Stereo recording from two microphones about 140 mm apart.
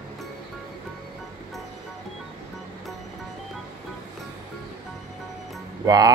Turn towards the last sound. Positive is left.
turn(degrees=-25)  # may be behind; listen again after turning